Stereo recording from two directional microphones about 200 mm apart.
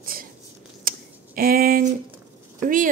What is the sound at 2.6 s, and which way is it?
Speech, 45° right (ahead or behind).